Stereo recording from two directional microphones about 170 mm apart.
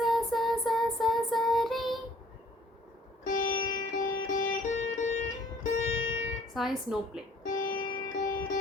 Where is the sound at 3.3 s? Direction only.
50° left (ahead or behind).